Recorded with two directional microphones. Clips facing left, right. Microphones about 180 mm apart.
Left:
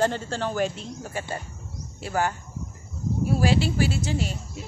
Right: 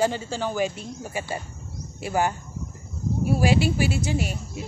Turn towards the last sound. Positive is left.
turn(degrees=-15)  # may be behind; listen again after turning